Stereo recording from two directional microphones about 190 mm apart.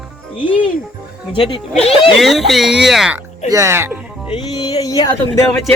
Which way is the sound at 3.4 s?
15° right (ahead or behind).